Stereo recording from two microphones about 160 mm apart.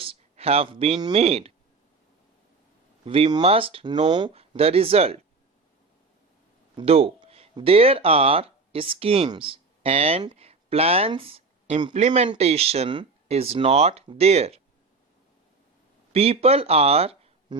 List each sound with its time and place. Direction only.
0.0 s speech: 35° right (ahead or behind)
3.0 s speech: 35° right (ahead or behind)
6.7 s speech: 35° right (ahead or behind)
11.9 s speech: 45° right (ahead or behind)
16.1 s speech: 40° right (ahead or behind)